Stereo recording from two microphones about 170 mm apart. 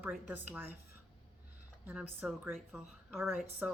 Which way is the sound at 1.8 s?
5° right (ahead or behind).